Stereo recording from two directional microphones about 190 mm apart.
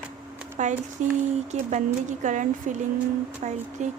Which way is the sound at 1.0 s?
40° right (ahead or behind).